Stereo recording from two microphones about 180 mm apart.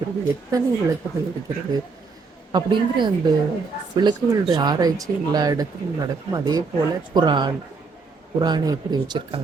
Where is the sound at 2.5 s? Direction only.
25° right (ahead or behind).